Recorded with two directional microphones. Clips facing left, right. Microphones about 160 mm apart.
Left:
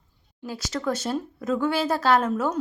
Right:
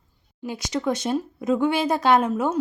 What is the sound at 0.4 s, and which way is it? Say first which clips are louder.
Speech: right 3 dB; 20° right (ahead or behind).